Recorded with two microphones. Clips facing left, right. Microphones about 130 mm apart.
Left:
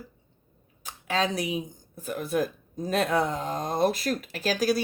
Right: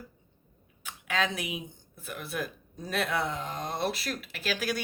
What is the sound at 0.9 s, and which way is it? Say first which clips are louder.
Speech: left 3 dB; 35° left (ahead or behind).